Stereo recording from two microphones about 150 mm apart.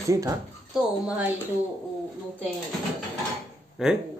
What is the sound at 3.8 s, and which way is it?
Speech, 5° right (ahead or behind).